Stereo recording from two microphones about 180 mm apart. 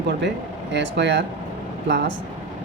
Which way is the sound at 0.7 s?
75° right (ahead or behind).